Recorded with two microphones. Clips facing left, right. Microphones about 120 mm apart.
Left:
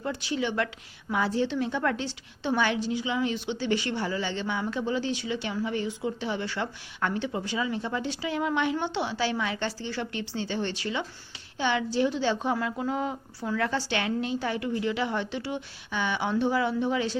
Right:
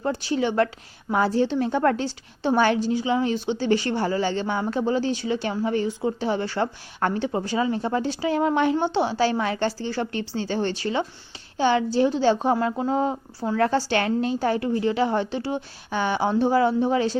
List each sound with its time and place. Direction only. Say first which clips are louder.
0.0 s a woman's voice: right 6 dB; 40° right (ahead or behind)